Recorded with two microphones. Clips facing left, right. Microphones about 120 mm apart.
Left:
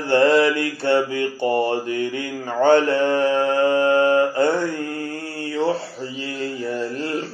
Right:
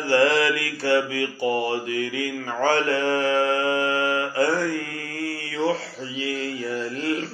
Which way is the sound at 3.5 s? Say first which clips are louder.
Left 6 dB; 40° left (ahead or behind).